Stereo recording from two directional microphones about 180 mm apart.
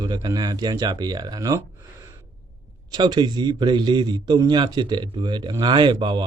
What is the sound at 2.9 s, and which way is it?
Speech, 25° right (ahead or behind).